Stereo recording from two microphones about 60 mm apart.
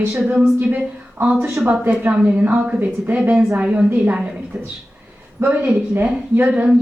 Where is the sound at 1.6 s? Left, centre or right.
Right.